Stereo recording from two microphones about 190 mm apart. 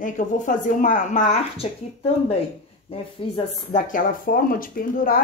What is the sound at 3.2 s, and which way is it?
Speech, 30° left (ahead or behind).